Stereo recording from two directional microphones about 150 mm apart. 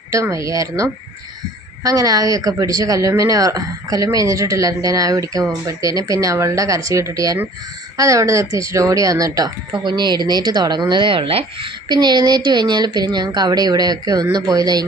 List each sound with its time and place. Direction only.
0.1 s a woman's voice: 20° right (ahead or behind)